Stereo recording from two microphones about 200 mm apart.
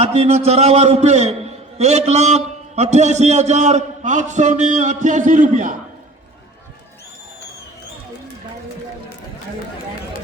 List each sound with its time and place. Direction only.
0.0 s a man's voice: 30° right (ahead or behind)